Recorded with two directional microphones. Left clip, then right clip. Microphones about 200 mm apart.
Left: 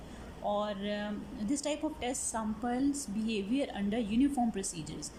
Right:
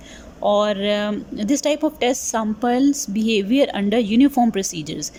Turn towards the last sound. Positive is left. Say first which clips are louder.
# right 15 dB
turn(degrees=-50)  # may be behind; listen again after turning